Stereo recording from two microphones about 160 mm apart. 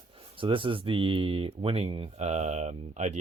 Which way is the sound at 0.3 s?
35° right (ahead or behind).